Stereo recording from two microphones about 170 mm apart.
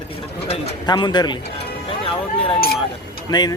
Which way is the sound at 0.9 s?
25° left (ahead or behind).